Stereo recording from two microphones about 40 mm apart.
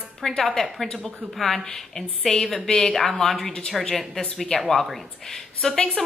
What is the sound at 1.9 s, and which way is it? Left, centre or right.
Speech, centre.